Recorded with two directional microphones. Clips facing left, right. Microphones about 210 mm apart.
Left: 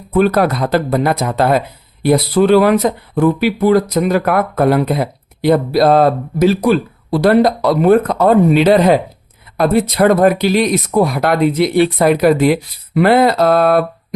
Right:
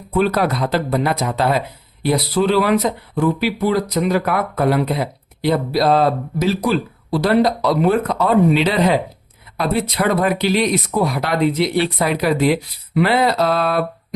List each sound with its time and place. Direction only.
0.1 s speech: 50° left (ahead or behind)